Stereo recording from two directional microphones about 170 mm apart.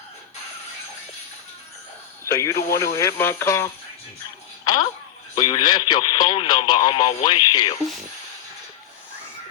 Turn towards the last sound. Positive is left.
turn(degrees=30)  # may be behind; listen again after turning